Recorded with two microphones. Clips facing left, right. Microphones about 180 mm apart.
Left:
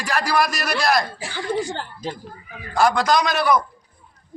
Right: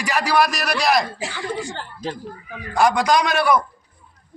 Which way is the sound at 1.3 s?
35° left (ahead or behind).